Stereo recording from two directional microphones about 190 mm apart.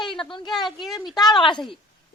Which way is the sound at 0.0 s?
25° left (ahead or behind).